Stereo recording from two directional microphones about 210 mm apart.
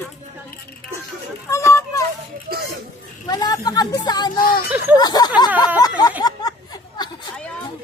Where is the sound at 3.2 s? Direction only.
20° left (ahead or behind).